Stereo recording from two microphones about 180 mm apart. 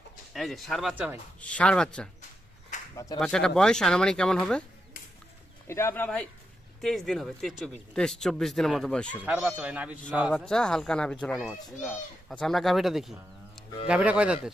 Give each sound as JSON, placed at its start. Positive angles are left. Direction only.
{"t": 0.3, "sound": "a child's voice", "side_deg": 0}
{"t": 1.4, "sound": "a child's voice", "side_deg": 5}
{"t": 2.9, "sound": "speech", "side_deg": 20}
{"t": 3.2, "sound": "a child's voice", "side_deg": 5}
{"t": 5.6, "sound": "a child's voice", "side_deg": 15}
{"t": 10.3, "sound": "a child's voice", "side_deg": 5}